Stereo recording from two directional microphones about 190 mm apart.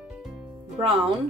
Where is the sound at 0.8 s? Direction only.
30° right (ahead or behind).